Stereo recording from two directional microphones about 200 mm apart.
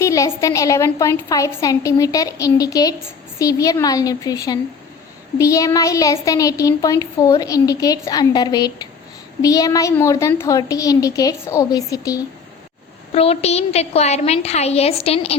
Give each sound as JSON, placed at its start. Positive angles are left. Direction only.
{"t": 0.0, "sound": "speech", "side_deg": 15}
{"t": 13.1, "sound": "a woman's voice", "side_deg": 30}